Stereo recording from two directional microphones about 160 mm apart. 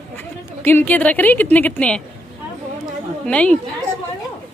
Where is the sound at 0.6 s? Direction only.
10° left (ahead or behind).